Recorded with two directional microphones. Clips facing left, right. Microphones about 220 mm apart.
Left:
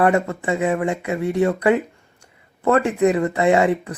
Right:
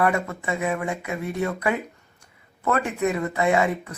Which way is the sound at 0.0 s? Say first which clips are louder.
Left 5 dB; 30° left (ahead or behind).